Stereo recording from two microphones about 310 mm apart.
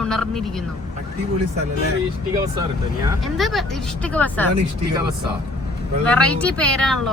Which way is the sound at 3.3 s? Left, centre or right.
Centre.